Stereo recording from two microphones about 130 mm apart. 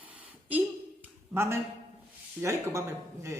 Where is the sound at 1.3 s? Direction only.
20° right (ahead or behind).